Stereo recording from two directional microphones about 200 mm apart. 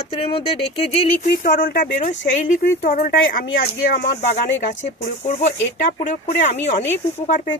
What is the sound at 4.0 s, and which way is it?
Speech, 35° left (ahead or behind).